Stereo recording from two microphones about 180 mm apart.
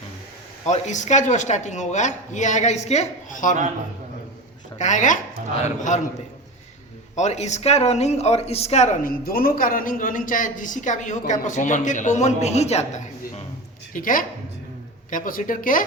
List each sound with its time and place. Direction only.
0.6 s speech: 40° left (ahead or behind)
4.8 s speech: 45° left (ahead or behind)
7.2 s speech: 40° left (ahead or behind)